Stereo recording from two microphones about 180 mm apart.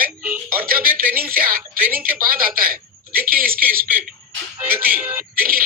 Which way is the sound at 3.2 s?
55° right (ahead or behind).